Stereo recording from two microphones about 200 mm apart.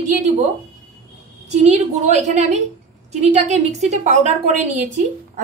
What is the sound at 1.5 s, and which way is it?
A woman's voice, 35° right (ahead or behind).